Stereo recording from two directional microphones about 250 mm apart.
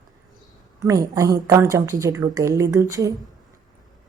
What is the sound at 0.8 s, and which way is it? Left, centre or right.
Speech, centre.